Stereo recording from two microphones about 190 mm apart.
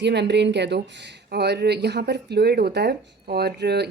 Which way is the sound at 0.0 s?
65° right (ahead or behind).